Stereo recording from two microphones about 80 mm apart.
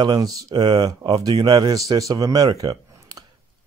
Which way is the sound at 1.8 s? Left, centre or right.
Right.